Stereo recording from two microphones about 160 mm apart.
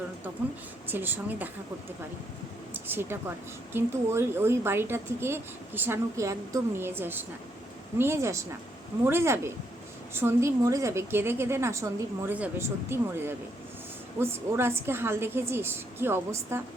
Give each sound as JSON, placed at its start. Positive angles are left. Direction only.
{"t": 0.9, "sound": "a woman's voice", "side_deg": -10}
{"t": 2.7, "sound": "a woman's voice", "side_deg": -15}